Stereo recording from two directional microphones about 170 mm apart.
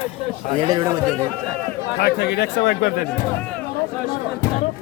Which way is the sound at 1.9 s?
70° left (ahead or behind).